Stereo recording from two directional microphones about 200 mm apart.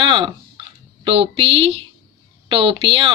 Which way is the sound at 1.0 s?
30° right (ahead or behind).